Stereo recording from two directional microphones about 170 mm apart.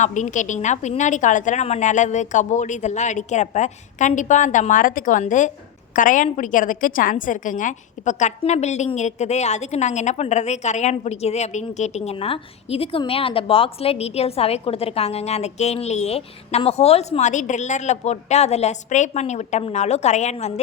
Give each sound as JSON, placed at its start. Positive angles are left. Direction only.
{"t": 0.0, "sound": "a woman's voice", "side_deg": 45}